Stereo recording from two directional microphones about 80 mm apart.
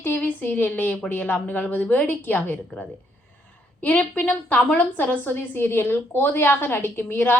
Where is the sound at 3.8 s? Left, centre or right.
Centre.